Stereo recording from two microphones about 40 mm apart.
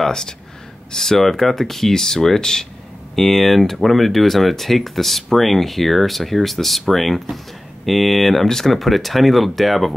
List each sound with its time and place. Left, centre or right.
0.0 s speech: centre